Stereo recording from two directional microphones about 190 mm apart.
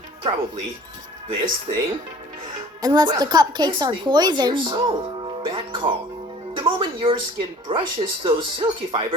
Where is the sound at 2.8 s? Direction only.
20° right (ahead or behind).